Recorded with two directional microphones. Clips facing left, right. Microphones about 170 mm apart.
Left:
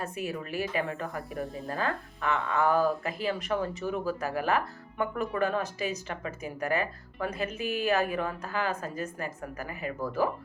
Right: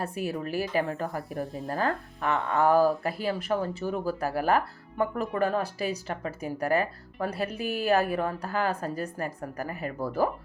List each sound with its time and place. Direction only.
0.0 s speech: 35° right (ahead or behind)
2.7 s speech: 5° right (ahead or behind)
3.0 s speech: 35° right (ahead or behind)